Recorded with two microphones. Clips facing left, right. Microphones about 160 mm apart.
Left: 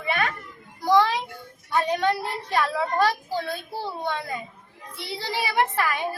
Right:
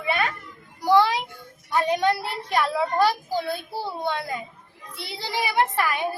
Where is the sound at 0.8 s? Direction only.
10° right (ahead or behind).